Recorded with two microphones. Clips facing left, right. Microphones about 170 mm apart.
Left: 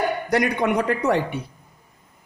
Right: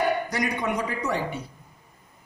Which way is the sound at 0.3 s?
60° left (ahead or behind).